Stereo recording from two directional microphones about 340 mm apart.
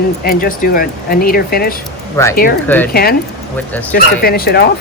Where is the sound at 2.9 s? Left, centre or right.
Left.